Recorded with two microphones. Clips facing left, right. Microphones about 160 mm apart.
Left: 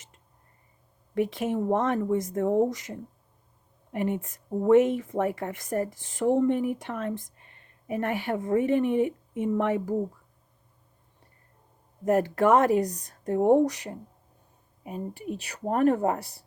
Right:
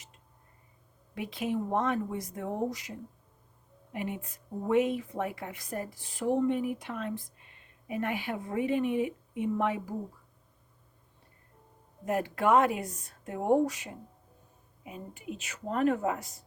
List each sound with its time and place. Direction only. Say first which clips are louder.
1.1 s a woman's voice: left 6 dB; 45° left (ahead or behind)
12.0 s speech: left 6 dB; 45° left (ahead or behind)
15.6 s speech: left 5 dB; 45° left (ahead or behind)